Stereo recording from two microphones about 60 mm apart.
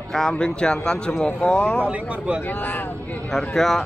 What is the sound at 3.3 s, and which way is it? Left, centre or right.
Speech, centre.